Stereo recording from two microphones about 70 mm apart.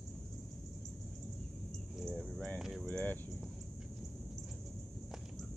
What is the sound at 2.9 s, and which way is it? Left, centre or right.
Speech, left.